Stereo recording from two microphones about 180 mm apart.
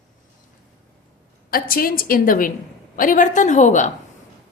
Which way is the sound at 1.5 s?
55° left (ahead or behind).